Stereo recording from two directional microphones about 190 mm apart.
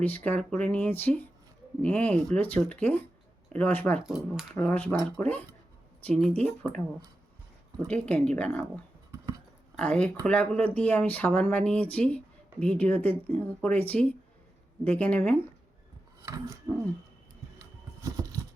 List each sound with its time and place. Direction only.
0.0 s speech: 10° left (ahead or behind)
4.0 s speech: 5° right (ahead or behind)
4.5 s speech: 5° left (ahead or behind)
7.9 s speech: 5° left (ahead or behind)
17.6 s a sound: 15° right (ahead or behind)